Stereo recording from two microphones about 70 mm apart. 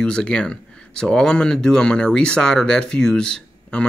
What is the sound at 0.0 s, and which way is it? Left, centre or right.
Speech, centre.